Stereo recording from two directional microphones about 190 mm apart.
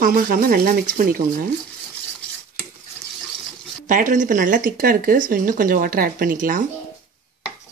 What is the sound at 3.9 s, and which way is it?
Speech, 45° right (ahead or behind).